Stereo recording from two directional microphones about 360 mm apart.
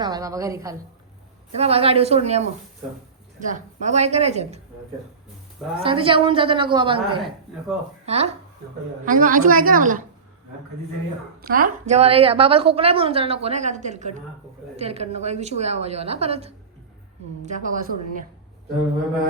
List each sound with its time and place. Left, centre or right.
0.0 s a woman's voice: centre
5.8 s a woman's voice: centre
7.2 s speech: centre
8.0 s a woman's voice: centre
11.4 s a woman's voice: right